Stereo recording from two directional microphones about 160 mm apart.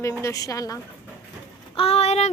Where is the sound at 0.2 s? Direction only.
20° left (ahead or behind).